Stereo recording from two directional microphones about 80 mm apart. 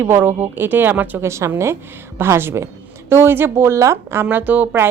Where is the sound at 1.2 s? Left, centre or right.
Right.